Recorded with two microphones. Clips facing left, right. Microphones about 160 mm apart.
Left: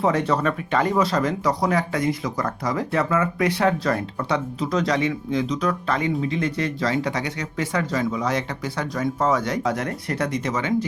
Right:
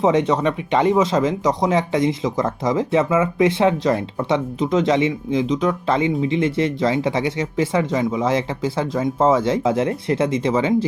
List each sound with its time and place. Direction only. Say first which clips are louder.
0.0 s speech: right 4 dB; 20° right (ahead or behind)